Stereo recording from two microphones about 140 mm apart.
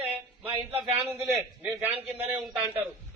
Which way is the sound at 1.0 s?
20° right (ahead or behind).